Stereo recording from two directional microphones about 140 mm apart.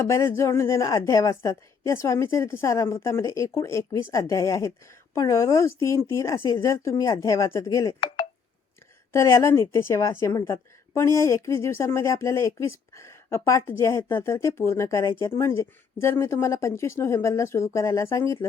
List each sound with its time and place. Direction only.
0.1 s a woman's voice: 20° left (ahead or behind)
8.0 s telephone dialing: 35° left (ahead or behind)
9.1 s a woman's voice: 20° left (ahead or behind)